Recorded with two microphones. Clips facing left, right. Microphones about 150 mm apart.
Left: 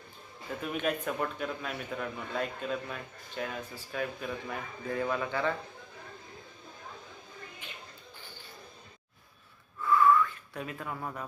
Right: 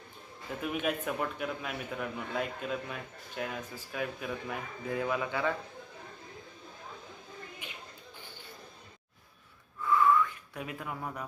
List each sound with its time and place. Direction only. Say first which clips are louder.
0.6 s a man's voice: even; 5° right (ahead or behind)
9.8 s a sound: left 2 dB; 20° right (ahead or behind)
10.5 s speech: left 1 dB; 10° right (ahead or behind)